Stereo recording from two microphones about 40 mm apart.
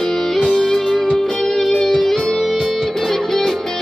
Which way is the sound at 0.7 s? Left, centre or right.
Centre.